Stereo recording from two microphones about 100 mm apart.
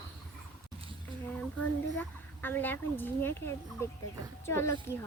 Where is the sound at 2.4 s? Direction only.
20° left (ahead or behind).